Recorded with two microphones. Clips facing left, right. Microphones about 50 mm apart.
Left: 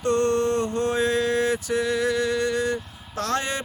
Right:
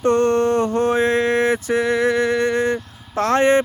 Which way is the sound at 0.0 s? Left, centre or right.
Right.